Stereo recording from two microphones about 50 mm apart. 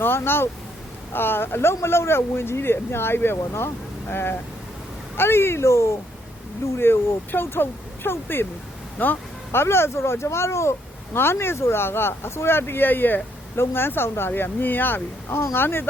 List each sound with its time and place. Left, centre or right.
0.0 s speech: left
6.7 s speech: left
9.0 s speech: left
9.5 s speech: left
13.6 s speech: left